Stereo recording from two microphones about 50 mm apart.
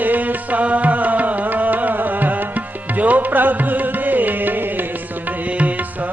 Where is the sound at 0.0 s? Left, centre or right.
Right.